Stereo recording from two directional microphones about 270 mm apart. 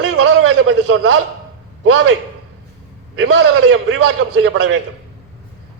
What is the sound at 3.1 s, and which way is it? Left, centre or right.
A man's voice, right.